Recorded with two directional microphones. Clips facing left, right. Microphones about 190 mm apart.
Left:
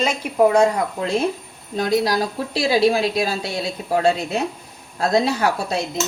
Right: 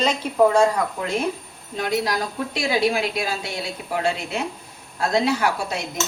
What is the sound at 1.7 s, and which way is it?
A woman's voice, 35° left (ahead or behind).